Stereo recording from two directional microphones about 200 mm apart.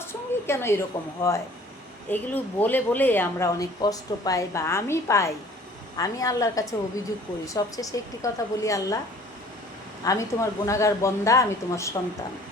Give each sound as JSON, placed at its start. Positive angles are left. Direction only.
{"t": 0.0, "sound": "a sound", "side_deg": 10}
{"t": 2.0, "sound": "speech", "side_deg": 10}
{"t": 10.0, "sound": "speech", "side_deg": 15}